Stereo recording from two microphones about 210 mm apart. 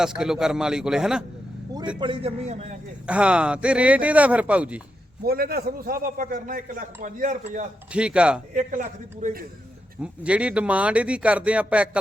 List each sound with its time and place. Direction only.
0.0 s speech: 5° right (ahead or behind)
2.0 s a man's voice: 25° right (ahead or behind)
3.1 s speech: 5° right (ahead or behind)
5.2 s a man's voice: 45° right (ahead or behind)
7.9 s speech: 5° right (ahead or behind)
8.5 s a man's voice: 35° right (ahead or behind)
10.0 s speech: 5° right (ahead or behind)